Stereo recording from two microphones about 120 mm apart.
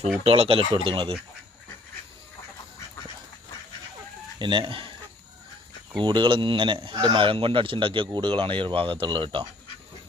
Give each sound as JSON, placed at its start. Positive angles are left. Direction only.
{"t": 0.3, "sound": "speech", "side_deg": -55}
{"t": 4.4, "sound": "speech", "side_deg": -40}
{"t": 6.0, "sound": "speech", "side_deg": -40}